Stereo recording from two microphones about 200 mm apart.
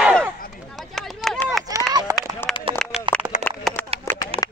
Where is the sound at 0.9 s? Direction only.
Centre (ahead or behind).